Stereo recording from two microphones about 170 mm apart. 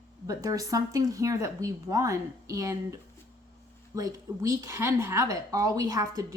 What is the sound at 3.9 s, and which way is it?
Speech, 20° right (ahead or behind).